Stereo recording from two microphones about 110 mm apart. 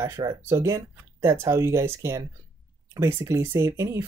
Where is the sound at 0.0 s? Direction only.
30° right (ahead or behind).